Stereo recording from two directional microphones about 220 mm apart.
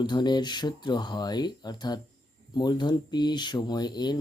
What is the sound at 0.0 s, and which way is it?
Speech, 20° left (ahead or behind).